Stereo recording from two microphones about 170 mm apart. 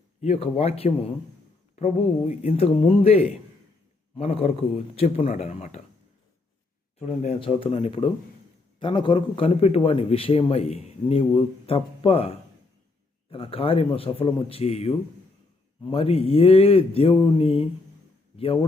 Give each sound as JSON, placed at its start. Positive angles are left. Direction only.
{"t": 0.2, "sound": "a man's voice", "side_deg": 35}
{"t": 5.2, "sound": "speech", "side_deg": 50}
{"t": 5.5, "sound": "a man's voice", "side_deg": 40}
{"t": 7.0, "sound": "a man's voice", "side_deg": 40}